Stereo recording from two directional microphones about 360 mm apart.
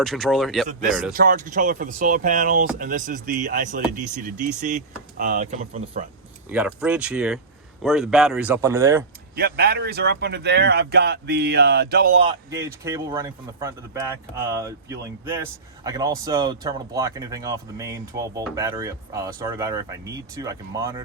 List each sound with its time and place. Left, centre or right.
0.0 s speech: centre
1.1 s speech: right
6.5 s speech: centre
9.3 s speech: right
12.2 s speech: centre